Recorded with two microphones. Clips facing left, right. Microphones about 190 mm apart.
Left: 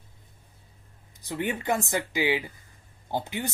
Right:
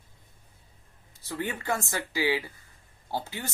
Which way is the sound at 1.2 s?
20° left (ahead or behind).